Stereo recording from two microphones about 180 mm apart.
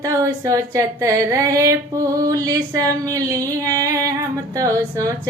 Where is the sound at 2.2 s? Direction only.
20° right (ahead or behind).